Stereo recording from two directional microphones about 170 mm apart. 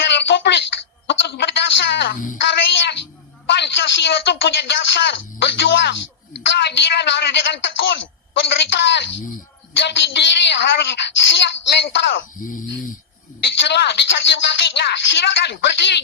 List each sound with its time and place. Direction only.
0.0 s a sound: 90° left
2.4 s music: 90° left
3.5 s a woman's voice: 90° left
13.4 s a woman's voice: 90° left